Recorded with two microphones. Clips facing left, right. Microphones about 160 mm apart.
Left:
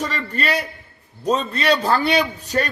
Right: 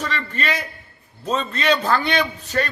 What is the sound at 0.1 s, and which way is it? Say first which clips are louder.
Speech: left 2 dB; 40° left (ahead or behind).